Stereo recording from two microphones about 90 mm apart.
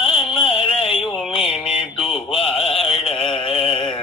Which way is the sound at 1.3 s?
90° left.